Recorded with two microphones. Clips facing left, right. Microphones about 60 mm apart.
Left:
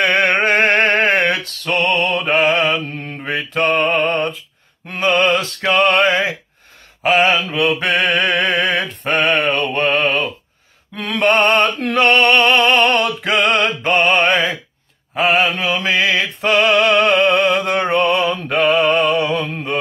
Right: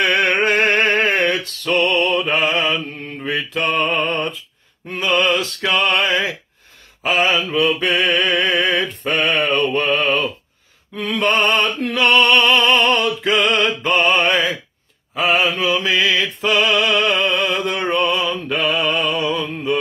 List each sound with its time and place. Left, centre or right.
0.0 s music: left
0.5 s a sound: left
1.7 s music: left
2.0 s mantra: left
4.9 s a sound: left
7.0 s mantra: left
9.8 s music: left
11.0 s music: left
17.1 s music: left